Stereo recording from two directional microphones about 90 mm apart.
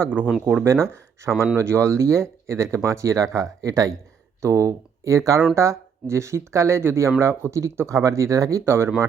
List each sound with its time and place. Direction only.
0.0 s speech: 20° right (ahead or behind)
0.6 s speech: 30° right (ahead or behind)